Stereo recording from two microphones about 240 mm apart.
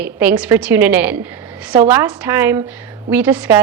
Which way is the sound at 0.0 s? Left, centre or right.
Centre.